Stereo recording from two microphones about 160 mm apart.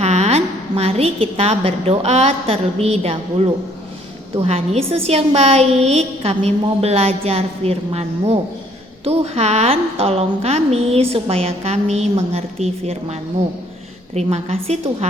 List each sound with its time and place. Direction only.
0.0 s a woman's voice: 40° right (ahead or behind)
4.4 s a woman's voice: 40° right (ahead or behind)